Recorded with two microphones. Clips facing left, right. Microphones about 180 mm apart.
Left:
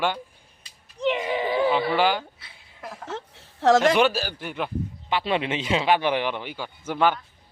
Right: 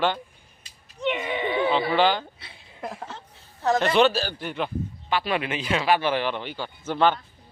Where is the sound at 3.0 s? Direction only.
75° left (ahead or behind).